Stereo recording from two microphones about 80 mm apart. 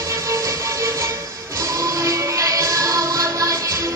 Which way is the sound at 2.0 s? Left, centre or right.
Right.